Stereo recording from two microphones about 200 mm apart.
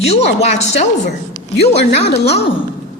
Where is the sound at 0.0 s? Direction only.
30° left (ahead or behind).